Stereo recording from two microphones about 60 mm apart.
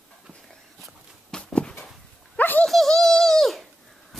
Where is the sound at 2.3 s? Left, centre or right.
Left.